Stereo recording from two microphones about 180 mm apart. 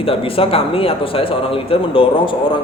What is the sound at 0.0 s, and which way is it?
A man's voice, 30° left (ahead or behind).